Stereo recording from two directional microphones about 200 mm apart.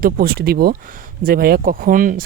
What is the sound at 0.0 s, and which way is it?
Speech, 50° right (ahead or behind).